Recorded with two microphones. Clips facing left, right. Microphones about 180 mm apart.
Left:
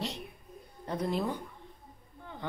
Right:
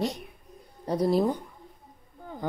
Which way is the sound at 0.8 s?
35° right (ahead or behind).